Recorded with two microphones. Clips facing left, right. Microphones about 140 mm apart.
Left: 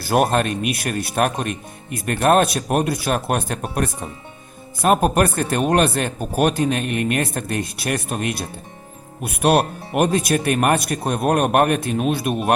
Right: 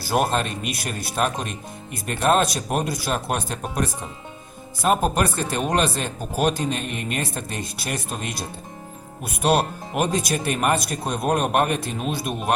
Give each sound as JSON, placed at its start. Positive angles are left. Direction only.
{"t": 0.0, "sound": "speech", "side_deg": 60}